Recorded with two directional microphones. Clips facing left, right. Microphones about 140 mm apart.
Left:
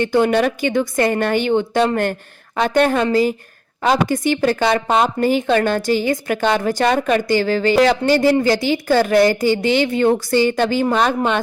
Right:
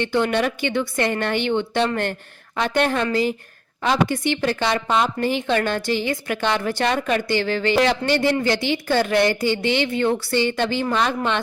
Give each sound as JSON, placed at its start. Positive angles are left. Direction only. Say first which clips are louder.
{"t": 0.0, "sound": "a woman's voice", "louder": "left 5 dB", "side_deg": 40}